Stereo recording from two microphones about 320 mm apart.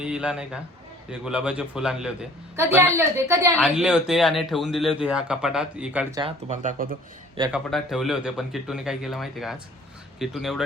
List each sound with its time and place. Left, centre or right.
0.0 s a woman's voice: centre
6.5 s speech: right
7.5 s speech: centre